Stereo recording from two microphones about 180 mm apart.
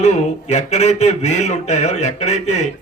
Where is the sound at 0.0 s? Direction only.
40° left (ahead or behind).